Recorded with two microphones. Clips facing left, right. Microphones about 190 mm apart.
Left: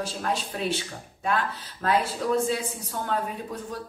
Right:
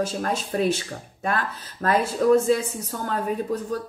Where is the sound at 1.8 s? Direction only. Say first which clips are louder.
Right 5 dB; 45° right (ahead or behind).